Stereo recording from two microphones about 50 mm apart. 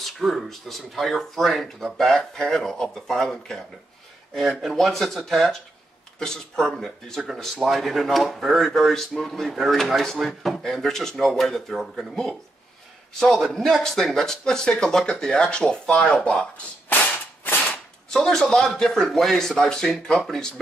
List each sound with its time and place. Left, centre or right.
0.0 s speech: centre
4.5 s speech: centre
10.6 s speech: centre
13.5 s speech: centre
18.1 s speech: centre